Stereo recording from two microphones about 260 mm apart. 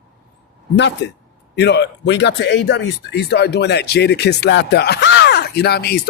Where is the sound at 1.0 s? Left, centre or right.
Left.